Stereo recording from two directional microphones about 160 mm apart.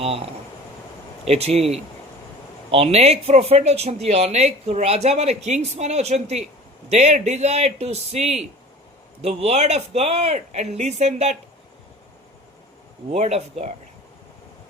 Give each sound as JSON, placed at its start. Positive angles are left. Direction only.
{"t": 0.0, "sound": "a man's voice", "side_deg": -35}
{"t": 13.1, "sound": "speech", "side_deg": -45}